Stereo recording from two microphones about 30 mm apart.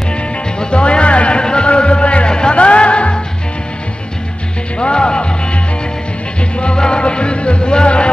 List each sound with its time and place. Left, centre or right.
0.6 s music: left
1.4 s music: left
4.7 s music: left
6.6 s music: left